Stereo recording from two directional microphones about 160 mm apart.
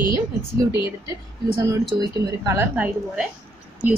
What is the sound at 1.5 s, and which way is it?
Speech, 25° right (ahead or behind).